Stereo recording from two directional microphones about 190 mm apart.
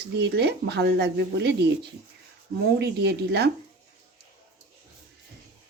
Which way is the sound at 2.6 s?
60° right (ahead or behind).